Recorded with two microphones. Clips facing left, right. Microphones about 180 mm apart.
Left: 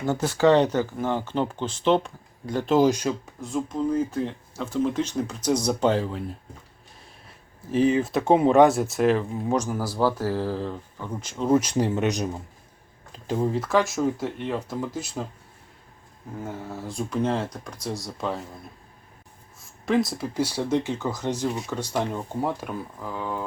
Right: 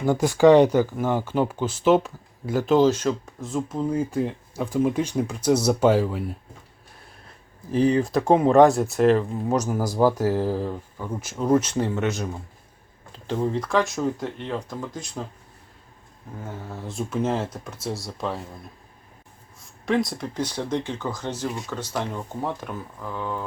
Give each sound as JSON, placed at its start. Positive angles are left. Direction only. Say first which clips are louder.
{"t": 0.0, "sound": "speech", "louder": "right 4 dB", "side_deg": -15}
{"t": 2.7, "sound": "speech", "louder": "right 1 dB", "side_deg": 10}
{"t": 3.4, "sound": "speech", "louder": "even", "side_deg": -5}
{"t": 7.9, "sound": "speech", "louder": "right 1 dB", "side_deg": 0}
{"t": 11.4, "sound": "speech", "louder": "even", "side_deg": 10}
{"t": 16.4, "sound": "speech", "louder": "left 2 dB", "side_deg": 5}
{"t": 19.5, "sound": "speech", "louder": "even", "side_deg": 0}